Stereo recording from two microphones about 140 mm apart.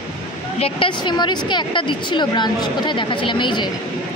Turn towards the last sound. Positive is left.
turn(degrees=35)  # may be behind; listen again after turning